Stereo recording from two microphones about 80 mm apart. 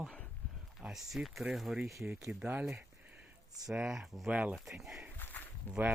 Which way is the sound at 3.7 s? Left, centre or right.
Centre.